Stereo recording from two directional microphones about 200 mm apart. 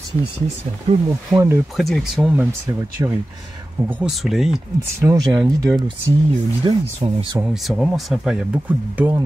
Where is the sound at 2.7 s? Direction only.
15° right (ahead or behind).